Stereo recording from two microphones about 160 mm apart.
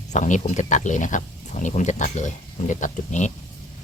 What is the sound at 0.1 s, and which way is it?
Speech, 50° left (ahead or behind).